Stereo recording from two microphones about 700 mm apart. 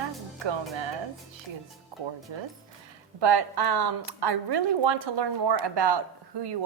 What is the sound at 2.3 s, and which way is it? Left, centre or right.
A woman's voice, right.